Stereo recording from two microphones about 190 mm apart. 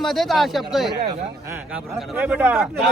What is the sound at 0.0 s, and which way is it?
Speech, centre (ahead or behind).